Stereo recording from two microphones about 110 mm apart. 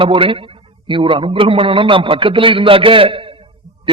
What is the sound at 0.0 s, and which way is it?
A man's voice, 55° right (ahead or behind).